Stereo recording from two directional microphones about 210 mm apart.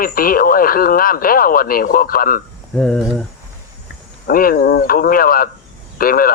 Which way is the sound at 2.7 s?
Centre (ahead or behind).